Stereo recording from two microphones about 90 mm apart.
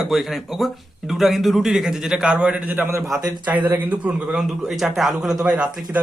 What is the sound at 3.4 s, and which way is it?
Speech, 20° right (ahead or behind).